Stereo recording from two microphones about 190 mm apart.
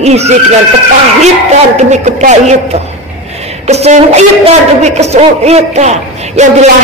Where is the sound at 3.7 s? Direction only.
35° right (ahead or behind).